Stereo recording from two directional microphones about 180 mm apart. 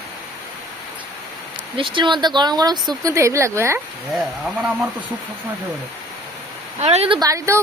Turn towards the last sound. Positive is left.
turn(degrees=-20)  # may be behind; listen again after turning